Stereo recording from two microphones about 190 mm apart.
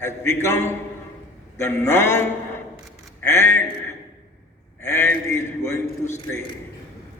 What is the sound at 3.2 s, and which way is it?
Speech, 15° left (ahead or behind).